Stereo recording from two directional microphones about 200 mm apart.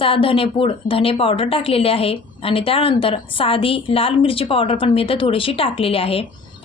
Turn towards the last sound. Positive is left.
turn(degrees=30)  # may be behind; listen again after turning